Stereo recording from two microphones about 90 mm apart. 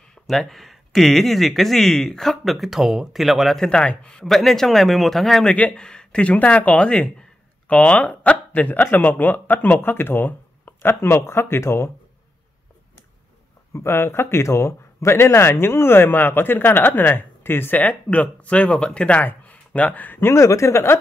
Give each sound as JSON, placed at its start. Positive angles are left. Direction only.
{"t": 0.3, "sound": "speech", "side_deg": 5}
{"t": 13.7, "sound": "speech", "side_deg": 25}